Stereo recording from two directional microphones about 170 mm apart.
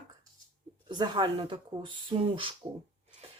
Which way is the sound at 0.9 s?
25° right (ahead or behind).